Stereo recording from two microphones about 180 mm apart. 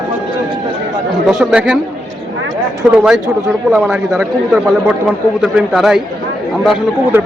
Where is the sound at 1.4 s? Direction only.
5° right (ahead or behind).